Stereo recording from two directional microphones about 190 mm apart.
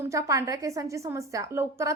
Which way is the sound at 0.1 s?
15° right (ahead or behind).